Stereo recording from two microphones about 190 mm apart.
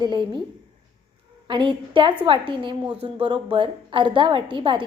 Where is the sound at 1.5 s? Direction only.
25° right (ahead or behind).